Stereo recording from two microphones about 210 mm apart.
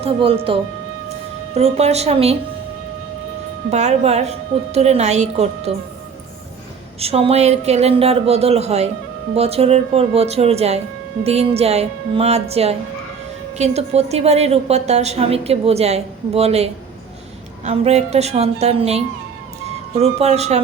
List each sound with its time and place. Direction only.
0.0 s a woman's voice: 25° right (ahead or behind)
3.7 s a woman's voice: 30° right (ahead or behind)
7.0 s a woman's voice: 30° right (ahead or behind)